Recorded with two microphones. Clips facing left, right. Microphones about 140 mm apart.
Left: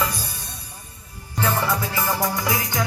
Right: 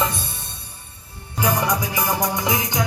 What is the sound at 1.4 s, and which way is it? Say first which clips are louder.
Music: right 2 dB; 15° right (ahead or behind).